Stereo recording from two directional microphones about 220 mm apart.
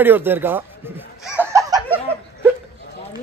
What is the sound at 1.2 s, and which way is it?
Laughter, 10° right (ahead or behind).